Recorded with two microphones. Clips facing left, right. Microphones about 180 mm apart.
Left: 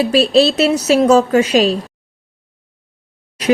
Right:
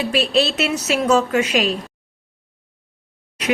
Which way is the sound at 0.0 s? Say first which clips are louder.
Left 7 dB; 35° left (ahead or behind).